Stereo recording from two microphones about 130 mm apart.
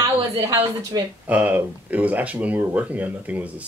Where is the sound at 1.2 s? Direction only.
10° right (ahead or behind).